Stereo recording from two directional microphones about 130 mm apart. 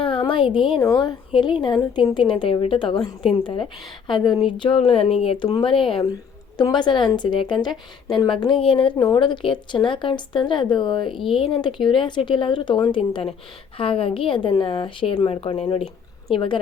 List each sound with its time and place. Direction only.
0.0 s a sound: 40° left (ahead or behind)
0.8 s speech: 25° left (ahead or behind)
1.0 s a woman's voice: 35° left (ahead or behind)
4.8 s a woman's voice: 50° left (ahead or behind); by 11.1 s 35° left (ahead or behind)
11.1 s speech: centre (ahead or behind)
11.5 s a woman's voice: 35° left (ahead or behind)